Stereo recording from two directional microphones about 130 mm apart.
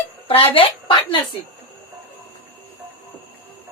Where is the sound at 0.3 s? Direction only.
45° left (ahead or behind).